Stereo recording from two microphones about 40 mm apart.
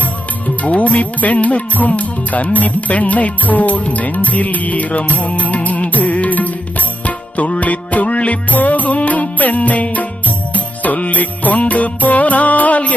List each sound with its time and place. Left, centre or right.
0.4 s music: left